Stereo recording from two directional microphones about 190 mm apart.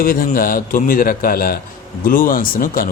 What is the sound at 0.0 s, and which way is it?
A man's voice, 50° left (ahead or behind).